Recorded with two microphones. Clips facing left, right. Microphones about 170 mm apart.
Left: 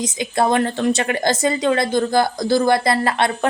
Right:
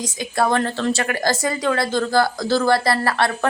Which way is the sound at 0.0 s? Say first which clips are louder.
Left 2 dB; 20° left (ahead or behind).